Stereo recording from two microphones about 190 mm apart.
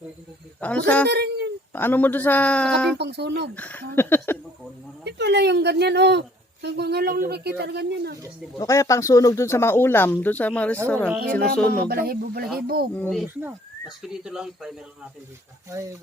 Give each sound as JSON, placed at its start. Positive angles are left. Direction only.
{"t": 0.6, "sound": "speech", "side_deg": 5}
{"t": 1.0, "sound": "a sound", "side_deg": -65}
{"t": 1.7, "sound": "speech", "side_deg": 10}
{"t": 3.0, "sound": "a woman's voice", "side_deg": -60}
{"t": 3.5, "sound": "speech", "side_deg": 10}
{"t": 5.0, "sound": "a woman's voice", "side_deg": -65}
{"t": 8.5, "sound": "speech", "side_deg": 15}
{"t": 11.8, "sound": "speech", "side_deg": -50}
{"t": 13.0, "sound": "speech", "side_deg": 0}